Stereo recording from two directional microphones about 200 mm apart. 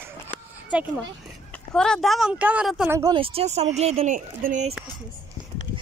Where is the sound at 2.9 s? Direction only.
20° right (ahead or behind); by 4.7 s 40° right (ahead or behind).